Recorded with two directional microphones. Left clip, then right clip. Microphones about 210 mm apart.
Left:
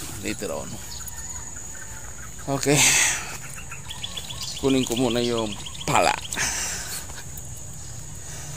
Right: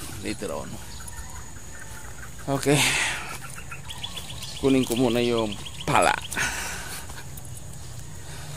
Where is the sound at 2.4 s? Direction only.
Centre (ahead or behind).